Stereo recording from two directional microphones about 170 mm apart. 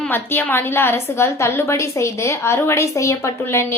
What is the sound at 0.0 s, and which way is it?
A woman's voice, 10° left (ahead or behind).